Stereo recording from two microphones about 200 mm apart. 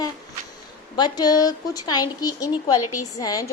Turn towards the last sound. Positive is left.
turn(degrees=20)  # may be behind; listen again after turning